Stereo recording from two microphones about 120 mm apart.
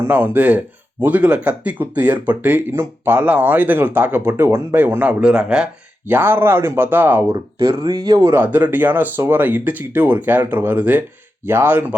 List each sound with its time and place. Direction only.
0.1 s speech: 15° right (ahead or behind)
7.3 s speech: 30° right (ahead or behind)
7.8 s speech: 40° right (ahead or behind); by 11.9 s 15° right (ahead or behind)